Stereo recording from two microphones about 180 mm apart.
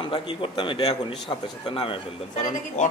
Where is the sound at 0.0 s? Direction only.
30° left (ahead or behind).